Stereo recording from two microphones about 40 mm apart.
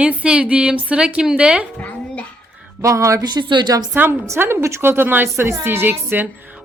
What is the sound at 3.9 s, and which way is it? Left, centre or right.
A woman's voice, right.